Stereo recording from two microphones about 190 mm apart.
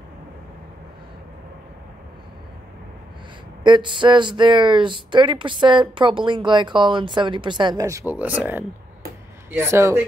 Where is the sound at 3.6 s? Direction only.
25° right (ahead or behind).